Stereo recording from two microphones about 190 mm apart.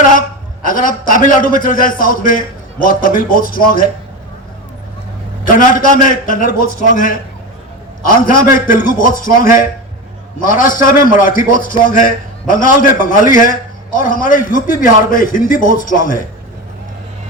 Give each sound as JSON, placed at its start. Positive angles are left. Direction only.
{"t": 0.2, "sound": "a man's voice", "side_deg": 45}
{"t": 6.0, "sound": "a man's voice", "side_deg": 45}